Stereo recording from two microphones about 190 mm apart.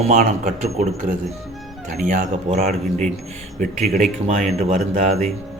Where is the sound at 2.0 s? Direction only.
45° right (ahead or behind).